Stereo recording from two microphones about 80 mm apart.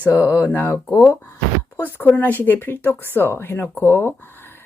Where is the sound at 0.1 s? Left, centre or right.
Left.